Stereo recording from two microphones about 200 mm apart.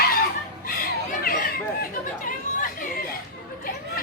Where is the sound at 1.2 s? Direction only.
45° left (ahead or behind).